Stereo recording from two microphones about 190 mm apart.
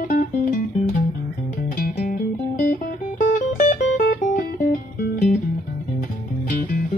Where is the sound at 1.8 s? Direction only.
45° left (ahead or behind).